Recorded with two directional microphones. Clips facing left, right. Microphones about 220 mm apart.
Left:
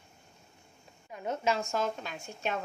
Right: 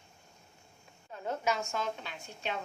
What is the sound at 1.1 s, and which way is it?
A woman's voice, 20° left (ahead or behind).